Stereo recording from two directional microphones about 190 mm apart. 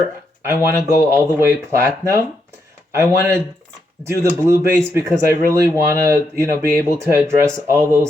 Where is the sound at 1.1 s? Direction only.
15° right (ahead or behind).